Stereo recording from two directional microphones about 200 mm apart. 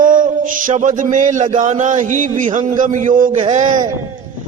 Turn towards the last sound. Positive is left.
turn(degrees=-35)  # may be behind; listen again after turning